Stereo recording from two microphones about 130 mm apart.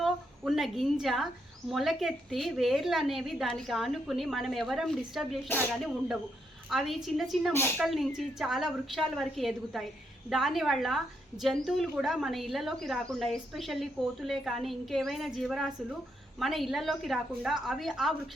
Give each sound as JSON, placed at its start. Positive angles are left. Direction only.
{"t": 0.0, "sound": "a woman's voice", "side_deg": 0}
{"t": 7.5, "sound": "speech", "side_deg": 20}
{"t": 7.8, "sound": "a woman's voice", "side_deg": 0}